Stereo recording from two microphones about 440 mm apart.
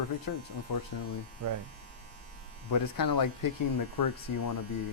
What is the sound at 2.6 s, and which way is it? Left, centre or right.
Speech, left.